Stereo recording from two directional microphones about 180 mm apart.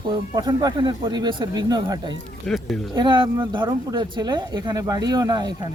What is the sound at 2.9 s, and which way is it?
Speech, 25° right (ahead or behind).